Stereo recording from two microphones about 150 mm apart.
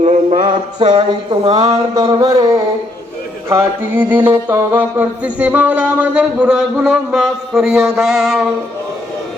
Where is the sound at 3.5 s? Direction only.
15° right (ahead or behind).